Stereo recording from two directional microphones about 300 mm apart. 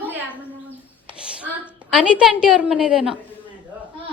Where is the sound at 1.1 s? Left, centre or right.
Centre.